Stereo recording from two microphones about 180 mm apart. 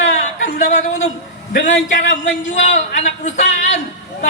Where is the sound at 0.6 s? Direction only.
40° left (ahead or behind).